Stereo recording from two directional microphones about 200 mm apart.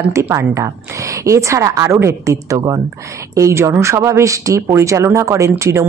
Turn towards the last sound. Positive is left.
turn(degrees=-15)  # may be behind; listen again after turning